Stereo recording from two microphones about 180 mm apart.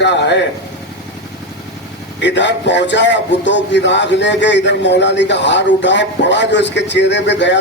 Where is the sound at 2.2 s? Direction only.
80° left.